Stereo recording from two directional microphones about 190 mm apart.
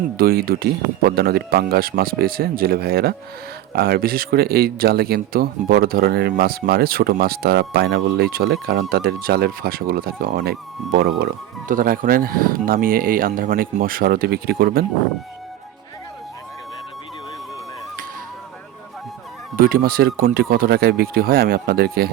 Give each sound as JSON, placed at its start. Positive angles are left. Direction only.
{"t": 0.2, "sound": "speech", "side_deg": -50}
{"t": 19.5, "sound": "speech", "side_deg": -50}